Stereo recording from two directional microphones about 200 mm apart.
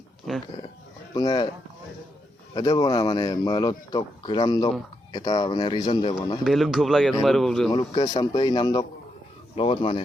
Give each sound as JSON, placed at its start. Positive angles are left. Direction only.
{"t": 0.3, "sound": "speech", "side_deg": 0}
{"t": 1.1, "sound": "speech", "side_deg": 20}
{"t": 2.6, "sound": "speech", "side_deg": 20}
{"t": 6.4, "sound": "speech", "side_deg": 0}
{"t": 7.7, "sound": "speech", "side_deg": 20}